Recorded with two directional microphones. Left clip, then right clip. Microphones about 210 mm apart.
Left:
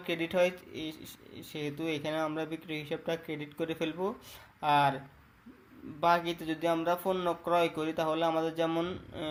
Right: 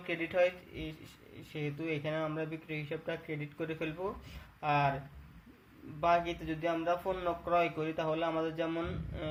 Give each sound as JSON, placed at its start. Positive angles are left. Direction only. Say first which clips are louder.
{"t": 0.0, "sound": "speech", "louder": "left 2 dB", "side_deg": 50}
{"t": 6.0, "sound": "speech", "louder": "left 2 dB", "side_deg": 45}